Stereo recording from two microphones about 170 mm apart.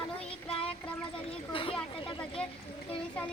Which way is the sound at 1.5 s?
30° left (ahead or behind).